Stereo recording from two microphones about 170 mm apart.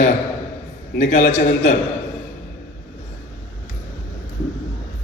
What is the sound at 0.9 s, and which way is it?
Speech, 45° left (ahead or behind).